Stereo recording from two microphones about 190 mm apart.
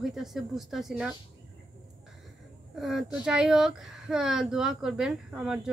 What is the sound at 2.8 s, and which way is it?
A woman's voice, centre (ahead or behind).